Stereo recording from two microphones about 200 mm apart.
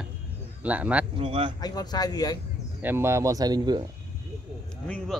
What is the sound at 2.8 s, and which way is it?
Speech, 10° right (ahead or behind).